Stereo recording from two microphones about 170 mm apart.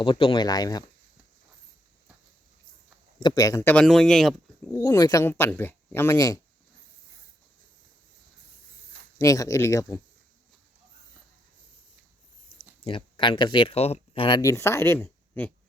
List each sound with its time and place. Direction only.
0.0 s speech: 30° left (ahead or behind)
3.2 s speech: 25° left (ahead or behind)
3.8 s speech: 5° left (ahead or behind)
4.7 s speech: 20° left (ahead or behind)
9.1 s speech: 20° left (ahead or behind)
12.8 s speech: 30° left (ahead or behind); by 15.5 s 10° left (ahead or behind)